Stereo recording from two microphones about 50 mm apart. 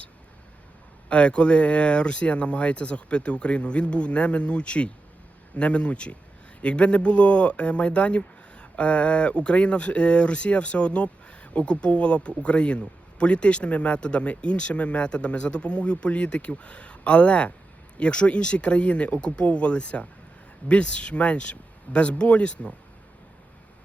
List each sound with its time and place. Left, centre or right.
1.1 s speech: left